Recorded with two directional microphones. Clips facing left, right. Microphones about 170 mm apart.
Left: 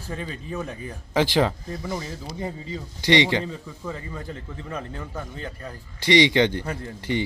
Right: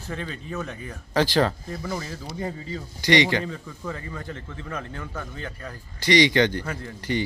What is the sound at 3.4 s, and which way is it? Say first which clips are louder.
Speech: even; 5° left (ahead or behind).